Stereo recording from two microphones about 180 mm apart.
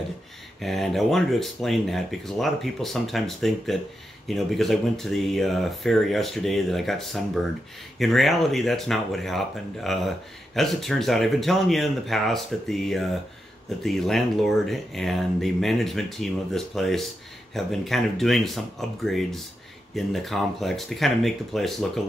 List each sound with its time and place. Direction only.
0.6 s speech: centre (ahead or behind)